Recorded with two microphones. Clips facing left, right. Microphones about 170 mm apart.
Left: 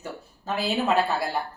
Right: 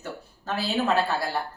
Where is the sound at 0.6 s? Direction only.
15° left (ahead or behind).